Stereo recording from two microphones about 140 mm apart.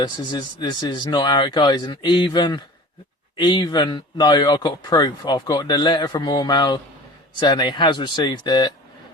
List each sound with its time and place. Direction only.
0.0 s speech: 30° left (ahead or behind)